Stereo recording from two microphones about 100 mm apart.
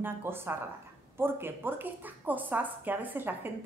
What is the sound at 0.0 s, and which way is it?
A woman's voice, 25° right (ahead or behind).